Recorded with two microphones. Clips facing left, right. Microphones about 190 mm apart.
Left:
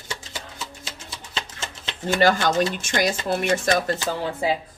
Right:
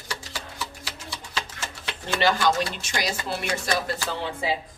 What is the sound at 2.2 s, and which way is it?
A woman's voice, 45° left (ahead or behind).